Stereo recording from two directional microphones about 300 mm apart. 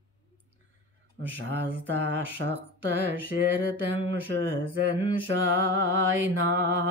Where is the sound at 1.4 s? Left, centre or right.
Right.